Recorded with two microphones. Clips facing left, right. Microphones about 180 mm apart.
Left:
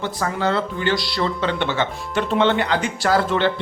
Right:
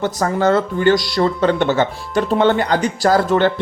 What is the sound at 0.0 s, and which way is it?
Speech, 45° right (ahead or behind).